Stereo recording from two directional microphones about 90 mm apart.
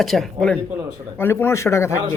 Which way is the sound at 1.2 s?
25° left (ahead or behind).